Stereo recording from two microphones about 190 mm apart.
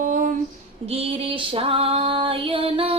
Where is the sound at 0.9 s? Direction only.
30° right (ahead or behind).